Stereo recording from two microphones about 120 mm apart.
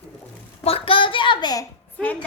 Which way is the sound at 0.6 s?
50° left (ahead or behind).